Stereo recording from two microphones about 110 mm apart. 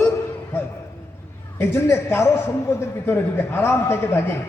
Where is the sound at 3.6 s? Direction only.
20° left (ahead or behind).